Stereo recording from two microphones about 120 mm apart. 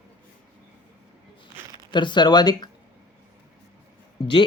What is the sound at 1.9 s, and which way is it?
Speech, 40° left (ahead or behind).